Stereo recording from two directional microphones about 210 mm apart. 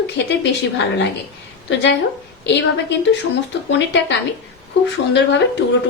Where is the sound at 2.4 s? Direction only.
55° left (ahead or behind).